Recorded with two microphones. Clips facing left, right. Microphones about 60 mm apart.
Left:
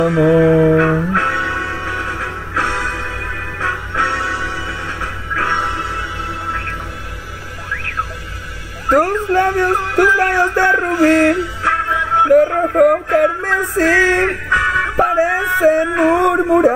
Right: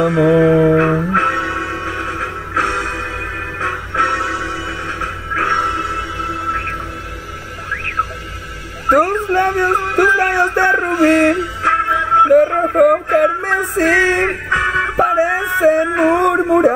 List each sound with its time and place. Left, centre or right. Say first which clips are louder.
0.0 s music: even; centre
1.2 s music: even; centre
3.9 s music: right 2 dB; centre
4.6 s music: right 1 dB; centre
8.8 s a sound: right 1 dB; centre
14.5 s music: left 2 dB; right
14.8 s music: even; centre
16.1 s a sound: left 1 dB; centre